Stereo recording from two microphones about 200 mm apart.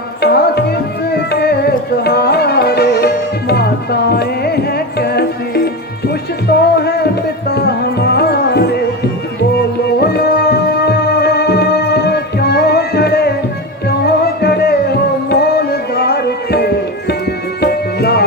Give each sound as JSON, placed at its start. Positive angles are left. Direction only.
{"t": 0.2, "sound": "tabla", "side_deg": 55}
{"t": 3.5, "sound": "music", "side_deg": 50}
{"t": 10.0, "sound": "music", "side_deg": 55}
{"t": 17.6, "sound": "tabla", "side_deg": 50}